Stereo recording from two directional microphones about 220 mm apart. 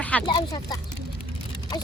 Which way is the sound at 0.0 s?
5° left (ahead or behind).